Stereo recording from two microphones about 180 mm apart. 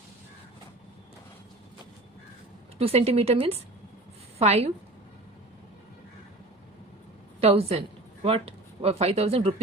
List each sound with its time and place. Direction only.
2.7 s a woman's voice: 35° right (ahead or behind)
7.4 s a woman's voice: 35° right (ahead or behind)